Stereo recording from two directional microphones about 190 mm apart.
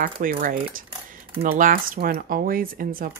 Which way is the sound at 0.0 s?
45° right (ahead or behind).